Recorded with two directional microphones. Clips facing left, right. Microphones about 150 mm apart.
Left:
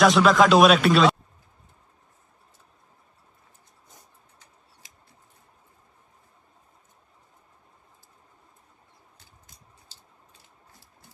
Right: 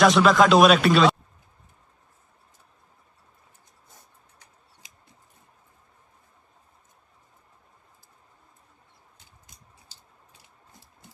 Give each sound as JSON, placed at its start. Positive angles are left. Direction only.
{"t": 0.0, "sound": "speech", "side_deg": 0}
{"t": 4.8, "sound": "mouse", "side_deg": -20}